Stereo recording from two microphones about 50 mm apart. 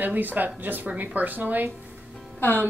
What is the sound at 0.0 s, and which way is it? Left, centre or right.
A woman's voice, right.